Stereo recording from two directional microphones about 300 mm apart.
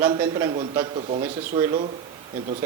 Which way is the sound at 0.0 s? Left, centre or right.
Centre.